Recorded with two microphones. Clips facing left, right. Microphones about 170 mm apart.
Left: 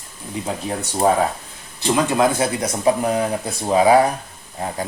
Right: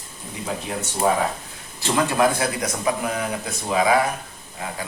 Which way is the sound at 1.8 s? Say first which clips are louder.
Left 2 dB; 15° left (ahead or behind).